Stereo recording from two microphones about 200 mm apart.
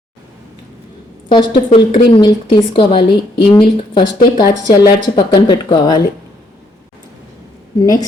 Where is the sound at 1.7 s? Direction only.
25° left (ahead or behind).